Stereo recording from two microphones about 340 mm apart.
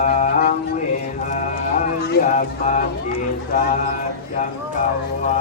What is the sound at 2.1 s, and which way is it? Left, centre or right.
Speech, left.